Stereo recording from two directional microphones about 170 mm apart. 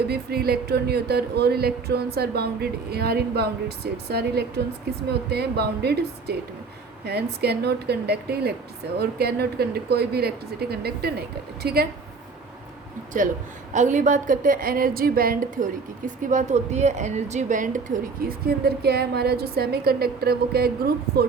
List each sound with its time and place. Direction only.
0.1 s speech: 70° right (ahead or behind)
13.1 s a woman's voice: 50° right (ahead or behind)